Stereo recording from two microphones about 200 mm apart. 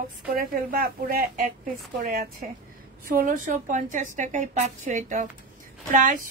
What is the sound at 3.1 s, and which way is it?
Speech, 45° right (ahead or behind).